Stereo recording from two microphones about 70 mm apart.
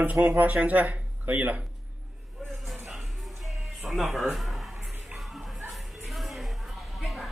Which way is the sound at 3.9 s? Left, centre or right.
Centre.